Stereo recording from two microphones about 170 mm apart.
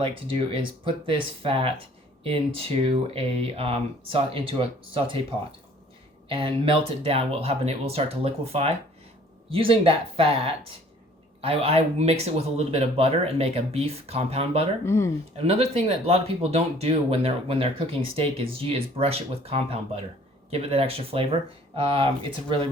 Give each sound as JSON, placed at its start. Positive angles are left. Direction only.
{"t": 0.0, "sound": "speech", "side_deg": -30}
{"t": 14.8, "sound": "speech", "side_deg": 15}
{"t": 15.4, "sound": "speech", "side_deg": -35}